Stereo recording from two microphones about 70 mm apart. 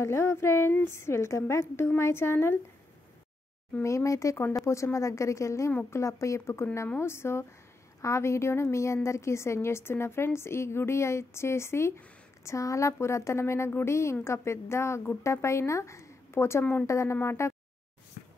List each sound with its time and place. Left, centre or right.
0.0 s a woman's voice: left
3.8 s a woman's voice: left